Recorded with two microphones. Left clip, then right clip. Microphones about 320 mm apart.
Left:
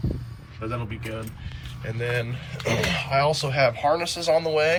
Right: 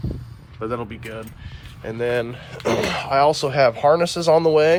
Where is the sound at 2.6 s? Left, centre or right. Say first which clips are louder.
Right 5 dB; right.